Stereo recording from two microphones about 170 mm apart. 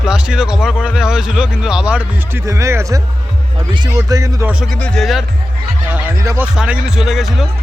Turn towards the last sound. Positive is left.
turn(degrees=0)  # may be behind; listen again after turning